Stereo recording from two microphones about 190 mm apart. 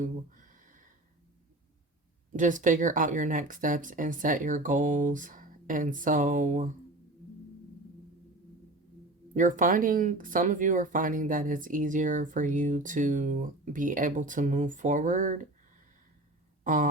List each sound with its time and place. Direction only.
0.0 s a sound: 45° right (ahead or behind)
2.3 s speech: 40° right (ahead or behind)
9.3 s speech: 45° right (ahead or behind)
16.6 s speech: 45° right (ahead or behind)